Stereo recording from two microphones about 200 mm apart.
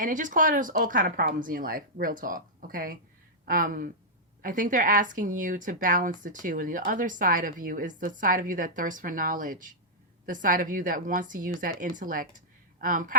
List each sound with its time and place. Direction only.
0.0 s a woman's voice: 40° right (ahead or behind)